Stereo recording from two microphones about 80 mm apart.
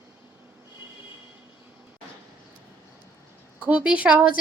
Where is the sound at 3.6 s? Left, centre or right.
Centre.